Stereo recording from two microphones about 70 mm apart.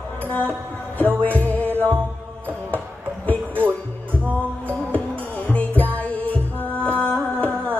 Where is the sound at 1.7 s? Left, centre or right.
Right.